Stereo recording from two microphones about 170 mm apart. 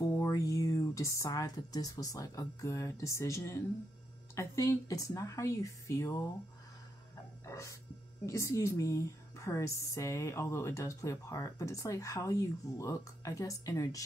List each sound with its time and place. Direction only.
0.1 s speech: 15° left (ahead or behind)
7.4 s music: 20° left (ahead or behind)
8.3 s a woman's voice: 15° left (ahead or behind)